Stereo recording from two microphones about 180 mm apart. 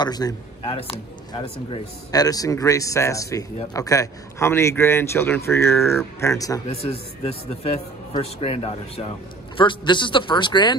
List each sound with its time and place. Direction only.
0.0 s a man's voice: 20° left (ahead or behind)
6.7 s speech: 35° left (ahead or behind)